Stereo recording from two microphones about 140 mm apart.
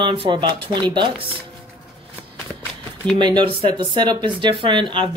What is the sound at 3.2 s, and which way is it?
Speech, 30° right (ahead or behind).